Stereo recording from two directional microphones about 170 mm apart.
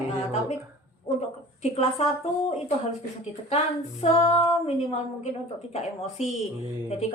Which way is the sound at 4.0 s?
35° left (ahead or behind).